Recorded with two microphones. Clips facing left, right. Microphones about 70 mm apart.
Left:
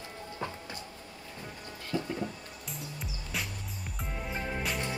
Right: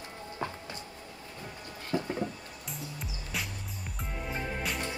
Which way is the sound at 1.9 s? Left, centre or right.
Right.